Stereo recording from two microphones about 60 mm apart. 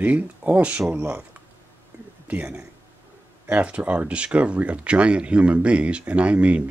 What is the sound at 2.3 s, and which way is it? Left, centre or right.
Speech, right.